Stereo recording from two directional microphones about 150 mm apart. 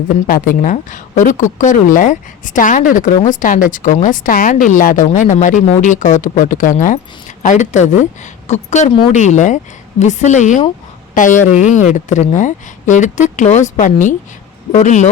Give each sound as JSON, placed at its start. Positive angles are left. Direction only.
{"t": 0.3, "sound": "a woman's voice", "side_deg": 70}